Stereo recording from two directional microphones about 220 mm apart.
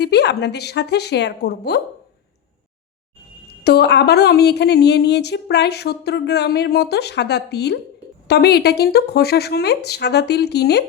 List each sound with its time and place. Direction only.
0.0 s speech: 50° left (ahead or behind)
3.6 s speech: 45° left (ahead or behind)